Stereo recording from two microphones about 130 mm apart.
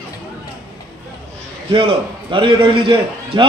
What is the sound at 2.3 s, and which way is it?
Speech, 40° right (ahead or behind).